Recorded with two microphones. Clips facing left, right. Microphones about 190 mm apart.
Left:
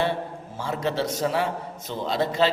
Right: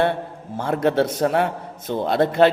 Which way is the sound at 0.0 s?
55° right (ahead or behind).